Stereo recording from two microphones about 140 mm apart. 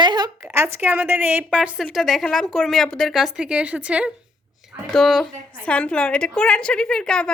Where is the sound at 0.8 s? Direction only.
15° right (ahead or behind).